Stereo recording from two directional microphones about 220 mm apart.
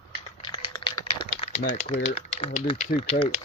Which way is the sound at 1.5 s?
30° left (ahead or behind).